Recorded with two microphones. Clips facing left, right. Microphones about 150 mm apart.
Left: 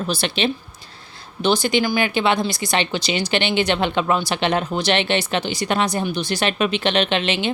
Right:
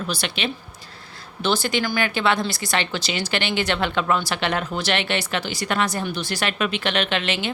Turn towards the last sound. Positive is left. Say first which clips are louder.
# left 4 dB
turn(degrees=20)  # may be behind; listen again after turning